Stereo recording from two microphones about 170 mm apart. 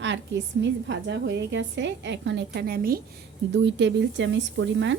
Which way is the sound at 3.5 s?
90° right.